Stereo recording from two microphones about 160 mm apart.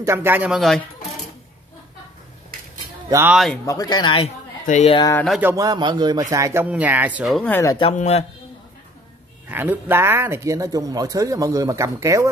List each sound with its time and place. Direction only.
0.0 s speech: 15° right (ahead or behind)
0.6 s speech: centre (ahead or behind)
3.1 s speech: 15° right (ahead or behind)
3.6 s speech: 20° left (ahead or behind)
4.6 s a man's voice: 50° left (ahead or behind)
5.4 s speech: 20° right (ahead or behind)
7.3 s speech: 10° left (ahead or behind)
7.9 s a man's voice: 45° left (ahead or behind)
9.5 s speech: 10° right (ahead or behind)